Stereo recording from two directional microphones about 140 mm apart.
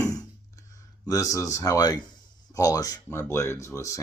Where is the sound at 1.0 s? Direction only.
25° left (ahead or behind).